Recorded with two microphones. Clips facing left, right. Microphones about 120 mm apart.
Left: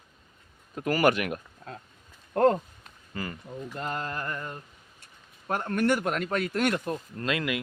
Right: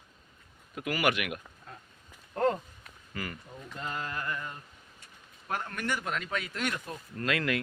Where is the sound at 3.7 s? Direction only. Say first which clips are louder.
Left 3 dB; 50° left (ahead or behind).